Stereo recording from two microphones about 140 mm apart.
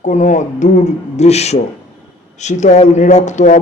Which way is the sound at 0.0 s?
60° left (ahead or behind).